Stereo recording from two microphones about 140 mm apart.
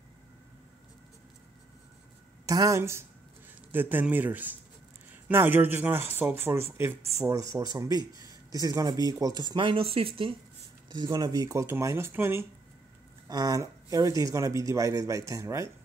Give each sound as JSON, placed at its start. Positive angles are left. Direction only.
{"t": 2.4, "sound": "speech", "side_deg": -25}
{"t": 10.9, "sound": "speech", "side_deg": -30}
{"t": 13.3, "sound": "speech", "side_deg": -25}